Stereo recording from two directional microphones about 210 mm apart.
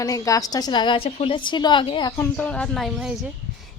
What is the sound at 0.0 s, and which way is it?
A woman's voice, 15° left (ahead or behind).